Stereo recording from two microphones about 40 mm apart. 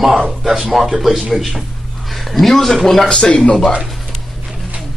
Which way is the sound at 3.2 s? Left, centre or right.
Left.